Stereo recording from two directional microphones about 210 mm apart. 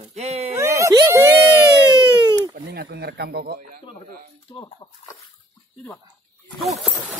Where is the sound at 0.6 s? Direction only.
15° right (ahead or behind).